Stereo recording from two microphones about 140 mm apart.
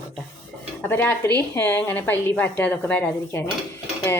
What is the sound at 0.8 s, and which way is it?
A woman's voice, 15° left (ahead or behind).